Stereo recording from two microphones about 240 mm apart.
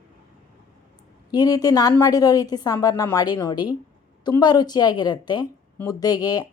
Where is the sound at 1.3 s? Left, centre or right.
Centre.